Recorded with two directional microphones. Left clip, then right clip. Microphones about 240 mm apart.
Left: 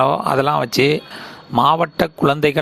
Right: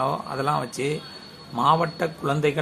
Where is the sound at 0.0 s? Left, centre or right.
Left.